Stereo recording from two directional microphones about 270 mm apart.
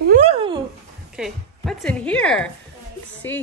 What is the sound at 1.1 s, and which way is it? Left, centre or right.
A woman's voice, centre.